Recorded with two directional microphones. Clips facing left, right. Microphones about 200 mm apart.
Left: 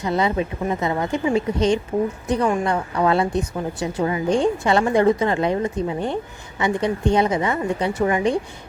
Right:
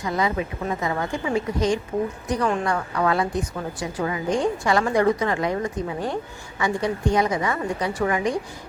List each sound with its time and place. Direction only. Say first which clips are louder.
0.0 s a woman's voice: left 3 dB; 25° left (ahead or behind)